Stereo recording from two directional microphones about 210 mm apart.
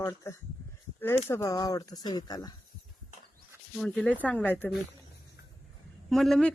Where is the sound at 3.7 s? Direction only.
5° left (ahead or behind).